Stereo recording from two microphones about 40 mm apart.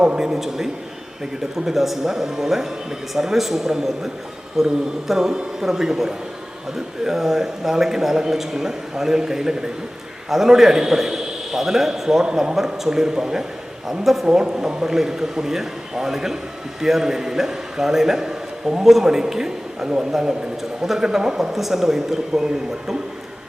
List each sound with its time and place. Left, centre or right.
0.3 s a man's voice: centre
12.5 s a man's voice: centre
14.3 s a man's voice: right